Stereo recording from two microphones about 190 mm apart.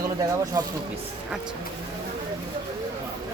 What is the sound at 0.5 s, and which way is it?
Speech, 20° right (ahead or behind).